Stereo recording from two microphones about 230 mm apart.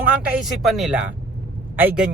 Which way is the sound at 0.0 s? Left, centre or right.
Centre.